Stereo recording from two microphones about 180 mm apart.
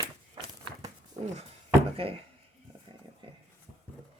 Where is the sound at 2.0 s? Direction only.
30° right (ahead or behind).